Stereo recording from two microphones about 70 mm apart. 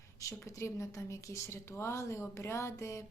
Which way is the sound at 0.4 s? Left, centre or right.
Left.